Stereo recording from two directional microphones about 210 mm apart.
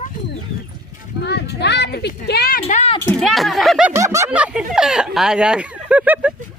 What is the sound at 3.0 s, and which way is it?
Speech, 5° left (ahead or behind).